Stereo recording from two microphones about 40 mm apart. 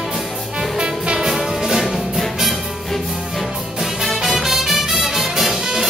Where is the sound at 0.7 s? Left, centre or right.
Centre.